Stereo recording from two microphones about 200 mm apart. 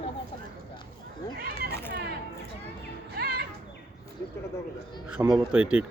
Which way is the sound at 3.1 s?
55° right (ahead or behind).